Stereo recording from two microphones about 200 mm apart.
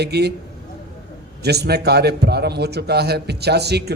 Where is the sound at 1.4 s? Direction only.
55° right (ahead or behind).